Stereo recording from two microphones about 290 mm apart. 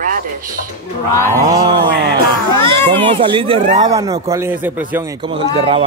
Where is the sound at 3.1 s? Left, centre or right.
Centre.